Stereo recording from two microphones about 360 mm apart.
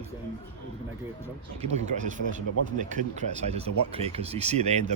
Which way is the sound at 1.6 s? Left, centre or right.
Centre.